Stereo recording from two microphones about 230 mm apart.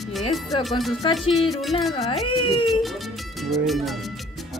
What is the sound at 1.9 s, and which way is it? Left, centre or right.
Speech, left.